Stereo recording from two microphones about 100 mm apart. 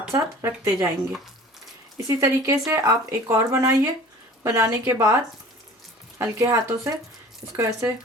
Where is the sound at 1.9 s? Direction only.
30° right (ahead or behind).